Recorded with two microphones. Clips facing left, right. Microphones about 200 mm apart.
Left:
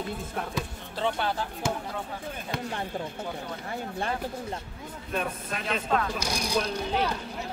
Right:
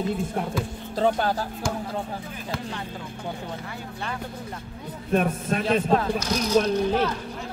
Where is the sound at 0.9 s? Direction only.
40° right (ahead or behind).